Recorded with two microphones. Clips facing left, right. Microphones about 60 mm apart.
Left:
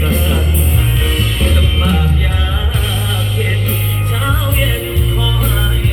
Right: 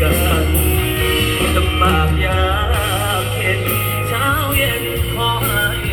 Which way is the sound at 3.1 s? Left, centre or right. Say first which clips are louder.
Right 1 dB; right.